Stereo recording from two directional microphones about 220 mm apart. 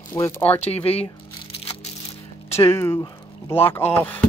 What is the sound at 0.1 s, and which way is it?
Speech, 10° left (ahead or behind).